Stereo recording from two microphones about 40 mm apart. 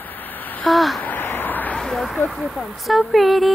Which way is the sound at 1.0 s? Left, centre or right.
Left.